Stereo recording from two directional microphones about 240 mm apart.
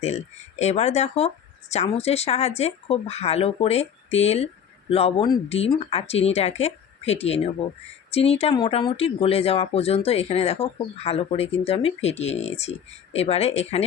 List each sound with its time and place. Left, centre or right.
0.0 s speech: left